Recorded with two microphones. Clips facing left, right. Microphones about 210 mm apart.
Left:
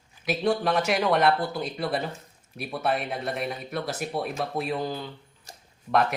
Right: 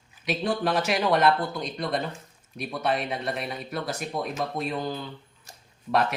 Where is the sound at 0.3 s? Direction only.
Centre (ahead or behind).